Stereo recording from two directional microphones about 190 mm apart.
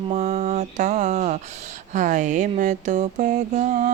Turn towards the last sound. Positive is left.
turn(degrees=-40)  # may be behind; listen again after turning